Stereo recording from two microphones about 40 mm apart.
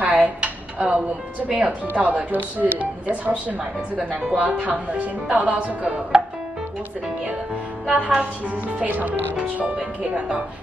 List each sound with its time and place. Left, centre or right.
0.0 s a sound: right
1.5 s speech: right
8.7 s speech: right
9.6 s speech: right